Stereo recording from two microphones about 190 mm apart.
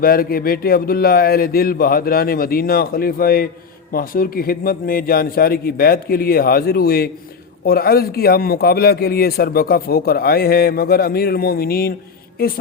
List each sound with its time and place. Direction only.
0.0 s a man's voice: 50° left (ahead or behind)